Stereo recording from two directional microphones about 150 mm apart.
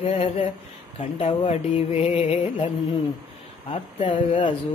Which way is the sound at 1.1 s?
40° left (ahead or behind).